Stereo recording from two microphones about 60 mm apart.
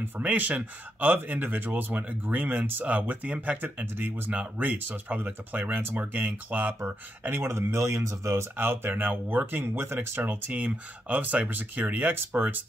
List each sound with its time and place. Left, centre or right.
0.2 s speech: right
6.8 s speech: right
8.5 s speech: right